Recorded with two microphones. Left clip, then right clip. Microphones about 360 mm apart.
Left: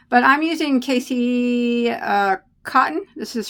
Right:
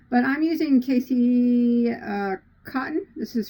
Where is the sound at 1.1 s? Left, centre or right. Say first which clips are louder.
Left 1 dB; left.